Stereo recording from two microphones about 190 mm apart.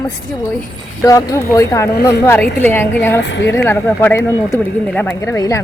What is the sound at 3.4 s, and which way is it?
Speech, 10° left (ahead or behind).